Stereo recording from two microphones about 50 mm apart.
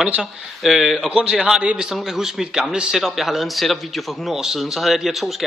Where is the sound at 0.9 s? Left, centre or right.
Centre.